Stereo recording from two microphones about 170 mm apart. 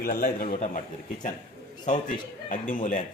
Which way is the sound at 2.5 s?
50° left (ahead or behind).